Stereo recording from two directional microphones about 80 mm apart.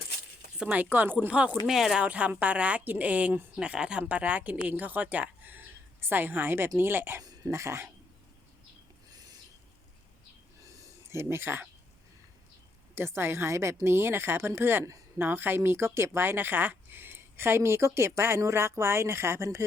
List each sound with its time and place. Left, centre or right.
0.6 s a woman's voice: centre
1.3 s speech: centre
2.0 s a woman's voice: centre
7.2 s speech: right
9.1 s a sound: right
10.6 s a sound: right
12.9 s speech: right